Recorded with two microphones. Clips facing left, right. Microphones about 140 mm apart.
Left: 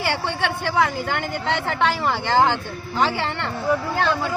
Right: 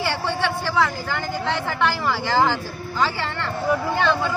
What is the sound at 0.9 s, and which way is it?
Speech, 65° left (ahead or behind).